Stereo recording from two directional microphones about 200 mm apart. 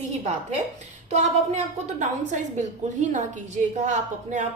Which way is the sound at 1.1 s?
35° right (ahead or behind).